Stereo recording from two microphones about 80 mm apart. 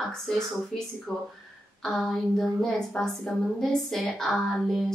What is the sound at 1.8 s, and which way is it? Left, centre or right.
A woman's voice, centre.